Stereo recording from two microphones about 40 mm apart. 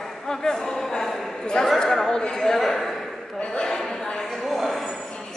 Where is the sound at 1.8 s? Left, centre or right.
Centre.